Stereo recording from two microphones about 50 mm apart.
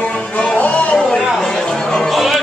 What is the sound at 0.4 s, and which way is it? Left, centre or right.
Music, left.